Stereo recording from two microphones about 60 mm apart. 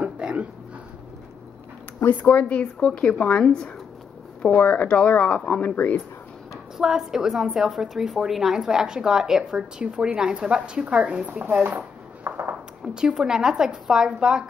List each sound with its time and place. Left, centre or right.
0.0 s a sound: centre
2.0 s speech: left
4.6 s speech: left
6.8 s a woman's voice: centre; by 11.4 s right
12.3 s a sound: right
12.8 s a woman's voice: centre